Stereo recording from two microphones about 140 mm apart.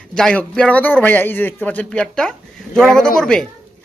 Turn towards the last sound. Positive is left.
turn(degrees=5)  # may be behind; listen again after turning